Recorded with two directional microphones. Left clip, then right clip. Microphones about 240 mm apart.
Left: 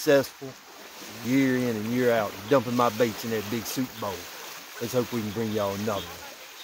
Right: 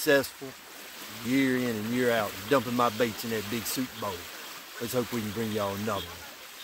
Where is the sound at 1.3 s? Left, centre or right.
Centre.